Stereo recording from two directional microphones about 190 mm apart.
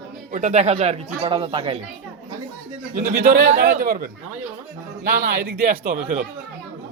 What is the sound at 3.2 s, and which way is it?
Speech, 55° right (ahead or behind).